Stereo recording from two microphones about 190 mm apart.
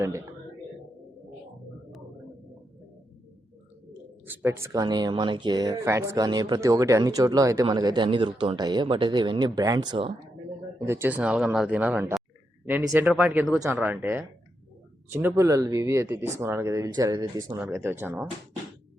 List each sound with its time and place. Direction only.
0.0 s speech: 15° right (ahead or behind)
4.3 s speech: 10° right (ahead or behind)
10.8 s speech: 10° right (ahead or behind)